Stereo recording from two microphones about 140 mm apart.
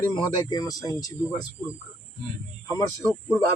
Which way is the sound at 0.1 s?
30° left (ahead or behind).